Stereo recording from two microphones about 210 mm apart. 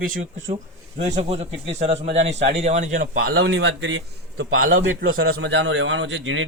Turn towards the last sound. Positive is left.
turn(degrees=-65)  # may be behind; listen again after turning